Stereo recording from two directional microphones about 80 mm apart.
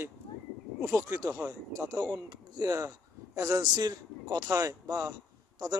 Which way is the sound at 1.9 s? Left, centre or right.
Right.